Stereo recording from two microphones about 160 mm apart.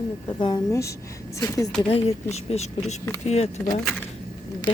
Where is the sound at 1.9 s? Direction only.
40° left (ahead or behind).